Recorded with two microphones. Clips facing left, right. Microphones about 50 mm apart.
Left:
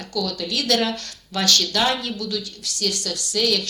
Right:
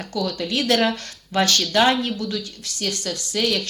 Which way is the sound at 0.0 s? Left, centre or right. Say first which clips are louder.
Right 1 dB; right.